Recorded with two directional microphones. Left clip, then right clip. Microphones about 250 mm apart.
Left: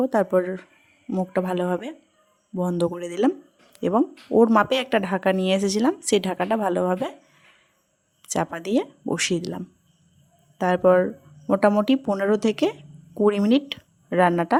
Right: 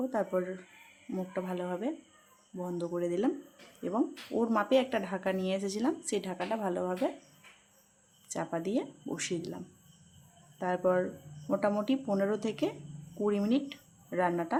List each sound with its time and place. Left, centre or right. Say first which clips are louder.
0.0 s speech: left 11 dB; left
8.2 s speech: left 9 dB; left